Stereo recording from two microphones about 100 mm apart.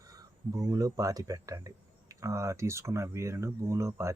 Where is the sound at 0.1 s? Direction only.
35° right (ahead or behind).